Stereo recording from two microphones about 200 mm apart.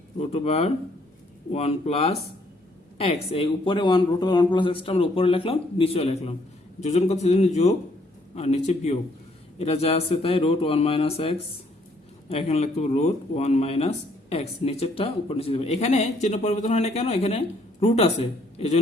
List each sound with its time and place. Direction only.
0.2 s speech: 30° left (ahead or behind)